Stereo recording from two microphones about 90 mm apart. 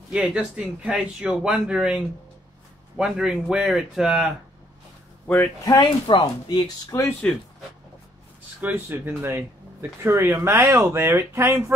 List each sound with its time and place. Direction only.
0.1 s speech: 10° right (ahead or behind)
5.2 s speech: 20° left (ahead or behind)
5.8 s speech: 60° left (ahead or behind)
7.2 s speech: 10° left (ahead or behind)
8.5 s speech: 20° right (ahead or behind)